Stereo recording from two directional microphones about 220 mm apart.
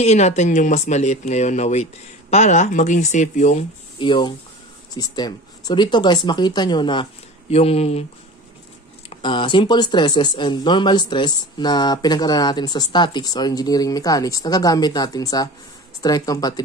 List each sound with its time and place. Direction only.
0.0 s speech: 30° left (ahead or behind)
9.1 s speech: 20° left (ahead or behind)